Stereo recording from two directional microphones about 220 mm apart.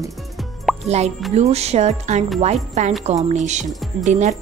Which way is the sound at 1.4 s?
30° right (ahead or behind).